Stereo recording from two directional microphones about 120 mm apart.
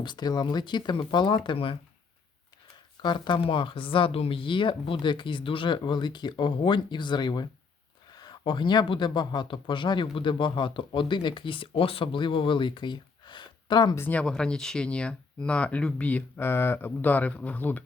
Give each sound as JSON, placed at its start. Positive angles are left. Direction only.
{"t": 0.0, "sound": "speech", "side_deg": 35}
{"t": 3.0, "sound": "speech", "side_deg": 40}
{"t": 13.9, "sound": "speech", "side_deg": 15}